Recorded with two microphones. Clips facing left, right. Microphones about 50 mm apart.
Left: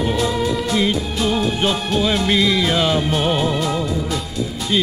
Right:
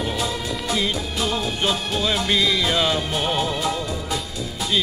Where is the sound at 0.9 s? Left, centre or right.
Centre.